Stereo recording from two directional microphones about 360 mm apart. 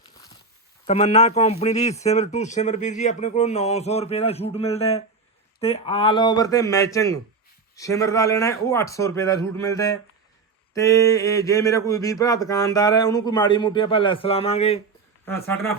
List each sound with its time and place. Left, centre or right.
0.9 s a man's voice: centre
15.2 s a man's voice: centre